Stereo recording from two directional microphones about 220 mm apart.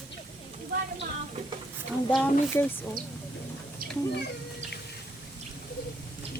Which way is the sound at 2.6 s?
10° left (ahead or behind).